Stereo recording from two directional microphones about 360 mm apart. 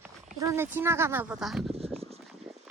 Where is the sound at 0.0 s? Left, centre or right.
Centre.